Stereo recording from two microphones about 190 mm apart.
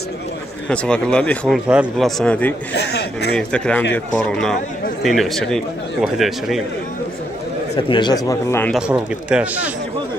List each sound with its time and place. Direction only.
0.7 s speech: 5° left (ahead or behind)
2.7 s a man's voice: 60° left (ahead or behind)
3.3 s speech: 5° left (ahead or behind)
7.7 s speech: 20° left (ahead or behind)
8.7 s speech: 5° right (ahead or behind)